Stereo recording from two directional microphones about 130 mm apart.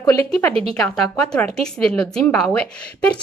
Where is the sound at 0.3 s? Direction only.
10° left (ahead or behind).